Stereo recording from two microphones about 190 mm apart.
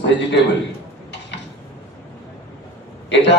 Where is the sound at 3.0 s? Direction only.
65° left (ahead or behind).